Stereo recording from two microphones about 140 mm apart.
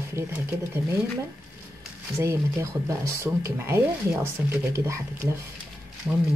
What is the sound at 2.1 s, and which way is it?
Speech, 20° right (ahead or behind).